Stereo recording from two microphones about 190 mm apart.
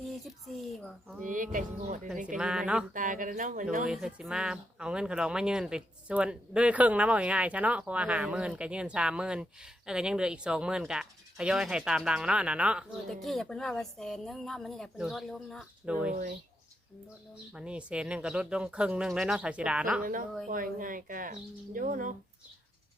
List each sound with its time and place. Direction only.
0.3 s speech: centre (ahead or behind)
1.2 s speech: 45° right (ahead or behind)
2.2 s speech: 5° right (ahead or behind)
2.9 s speech: 45° right (ahead or behind)
3.8 s speech: centre (ahead or behind)
17.5 s speech: 5° right (ahead or behind)
20.5 s speech: 45° right (ahead or behind)